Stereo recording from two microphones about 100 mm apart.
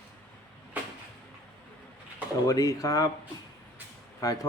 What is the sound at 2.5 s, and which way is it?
Speech, 35° left (ahead or behind).